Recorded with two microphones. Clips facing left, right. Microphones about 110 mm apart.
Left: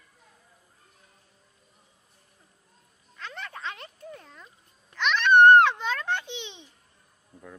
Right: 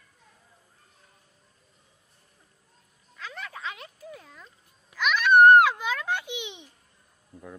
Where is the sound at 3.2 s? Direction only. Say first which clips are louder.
Even; 5° right (ahead or behind).